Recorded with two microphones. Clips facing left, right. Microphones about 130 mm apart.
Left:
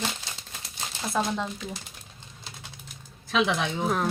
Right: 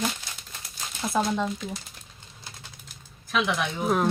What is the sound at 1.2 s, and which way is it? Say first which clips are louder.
Speech: right 2 dB; 10° right (ahead or behind).